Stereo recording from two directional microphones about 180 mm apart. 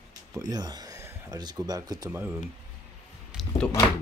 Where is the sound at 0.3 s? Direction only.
20° right (ahead or behind).